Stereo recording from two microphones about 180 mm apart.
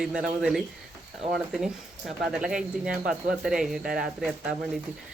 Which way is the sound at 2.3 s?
5° right (ahead or behind).